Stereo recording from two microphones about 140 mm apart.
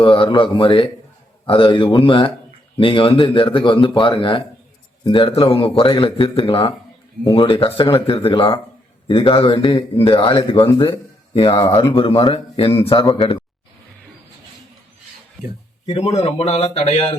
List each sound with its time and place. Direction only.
0.0 s a man's voice: 40° left (ahead or behind)
13.0 s speech: 25° left (ahead or behind)
15.9 s speech: 45° left (ahead or behind)